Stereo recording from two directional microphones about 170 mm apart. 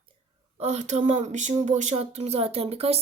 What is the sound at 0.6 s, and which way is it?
A child's voice, 40° right (ahead or behind).